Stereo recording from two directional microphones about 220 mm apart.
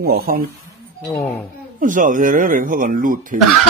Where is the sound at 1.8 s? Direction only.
35° right (ahead or behind).